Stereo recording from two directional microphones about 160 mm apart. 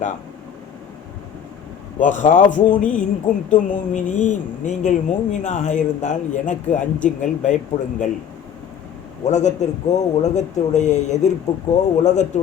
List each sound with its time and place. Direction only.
2.0 s speech: 50° left (ahead or behind)
9.2 s speech: 45° left (ahead or behind)